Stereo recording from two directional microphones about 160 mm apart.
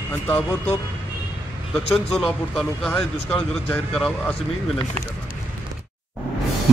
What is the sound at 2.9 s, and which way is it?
Speech, 10° left (ahead or behind).